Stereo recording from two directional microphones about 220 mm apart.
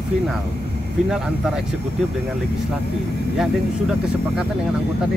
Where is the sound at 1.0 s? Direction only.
Centre (ahead or behind).